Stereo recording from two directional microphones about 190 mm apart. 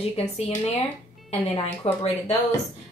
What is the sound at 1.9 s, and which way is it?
Speech, 30° left (ahead or behind).